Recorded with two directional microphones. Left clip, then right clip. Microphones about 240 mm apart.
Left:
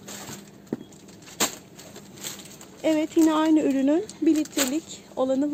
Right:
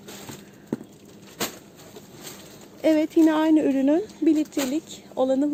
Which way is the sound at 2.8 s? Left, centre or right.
Centre.